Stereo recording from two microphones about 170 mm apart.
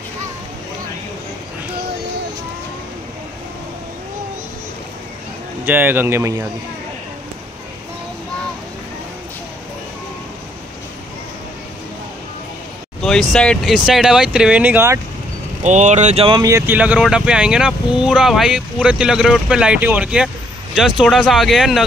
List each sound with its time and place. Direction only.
5.7 s speech: 10° right (ahead or behind)
13.0 s speech: centre (ahead or behind)
15.6 s speech: 45° right (ahead or behind)
16.4 s speech: 15° right (ahead or behind)